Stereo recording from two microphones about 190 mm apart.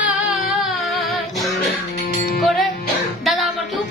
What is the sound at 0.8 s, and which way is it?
Music, centre (ahead or behind).